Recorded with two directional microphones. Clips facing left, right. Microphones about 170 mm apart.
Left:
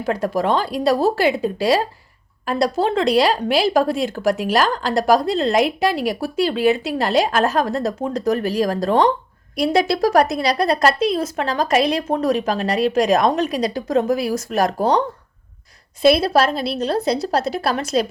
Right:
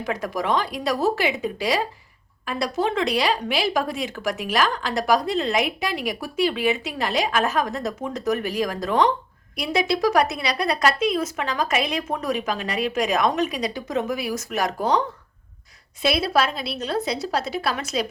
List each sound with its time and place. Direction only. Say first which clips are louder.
0.0 s speech: left 6 dB; 30° left (ahead or behind)